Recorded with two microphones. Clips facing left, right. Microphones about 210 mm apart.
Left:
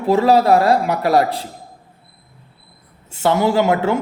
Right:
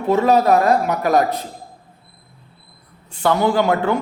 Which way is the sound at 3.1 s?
25° left (ahead or behind).